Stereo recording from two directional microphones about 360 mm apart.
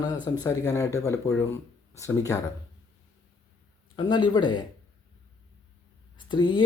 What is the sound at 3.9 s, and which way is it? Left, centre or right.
Speech, centre.